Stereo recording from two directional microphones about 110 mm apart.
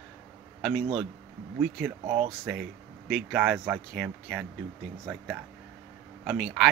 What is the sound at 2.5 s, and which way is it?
Speech, 10° right (ahead or behind).